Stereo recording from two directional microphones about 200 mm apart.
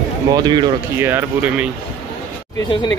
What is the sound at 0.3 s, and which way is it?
Speech, 20° right (ahead or behind).